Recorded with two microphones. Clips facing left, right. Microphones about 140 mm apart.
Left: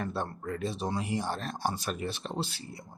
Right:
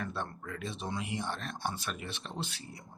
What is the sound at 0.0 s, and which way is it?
Speech, 35° left (ahead or behind).